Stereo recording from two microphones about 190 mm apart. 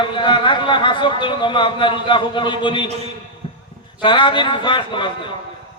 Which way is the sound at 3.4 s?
25° left (ahead or behind).